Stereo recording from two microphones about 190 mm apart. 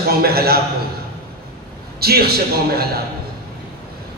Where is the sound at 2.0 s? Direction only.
55° right (ahead or behind).